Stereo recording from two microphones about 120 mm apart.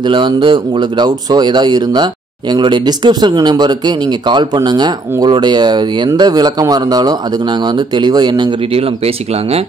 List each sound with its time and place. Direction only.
0.0 s speech: 40° right (ahead or behind)
8.7 s speech: 55° right (ahead or behind)